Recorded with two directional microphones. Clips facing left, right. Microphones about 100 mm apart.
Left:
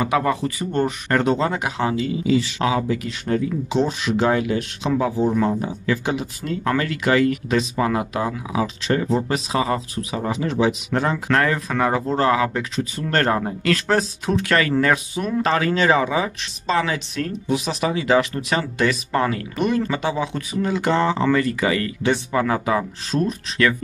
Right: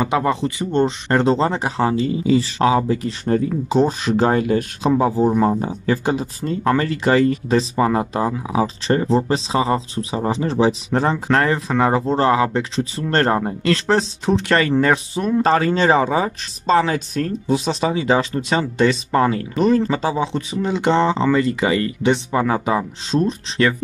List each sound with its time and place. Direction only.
0.0 s speech: 25° right (ahead or behind)